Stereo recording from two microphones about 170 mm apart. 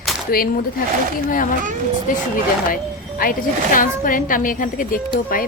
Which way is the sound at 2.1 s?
55° left (ahead or behind).